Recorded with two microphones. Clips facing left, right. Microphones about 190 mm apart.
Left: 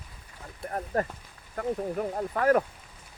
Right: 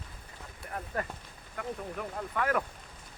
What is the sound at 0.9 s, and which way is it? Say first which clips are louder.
Speech: left 7 dB; 40° left (ahead or behind).